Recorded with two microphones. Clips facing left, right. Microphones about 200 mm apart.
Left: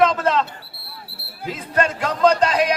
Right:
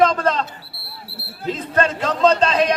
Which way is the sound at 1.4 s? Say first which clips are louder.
Right 2 dB; 10° left (ahead or behind).